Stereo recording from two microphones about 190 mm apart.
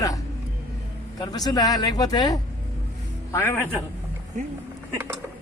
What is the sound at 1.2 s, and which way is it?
Speech, 20° left (ahead or behind).